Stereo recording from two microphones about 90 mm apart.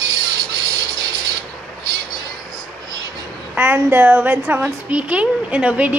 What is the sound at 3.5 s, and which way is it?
A woman's voice, 15° right (ahead or behind).